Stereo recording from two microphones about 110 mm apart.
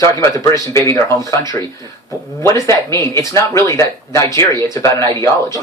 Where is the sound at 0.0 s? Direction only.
30° left (ahead or behind).